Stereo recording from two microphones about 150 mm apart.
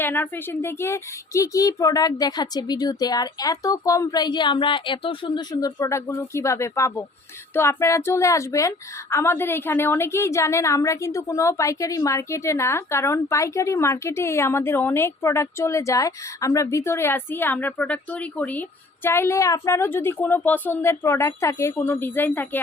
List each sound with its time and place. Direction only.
0.0 s a woman's voice: 15° left (ahead or behind)